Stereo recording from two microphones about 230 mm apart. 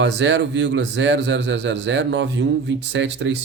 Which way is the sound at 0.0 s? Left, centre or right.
Right.